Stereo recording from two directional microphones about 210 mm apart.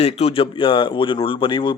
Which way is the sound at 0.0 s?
30° left (ahead or behind).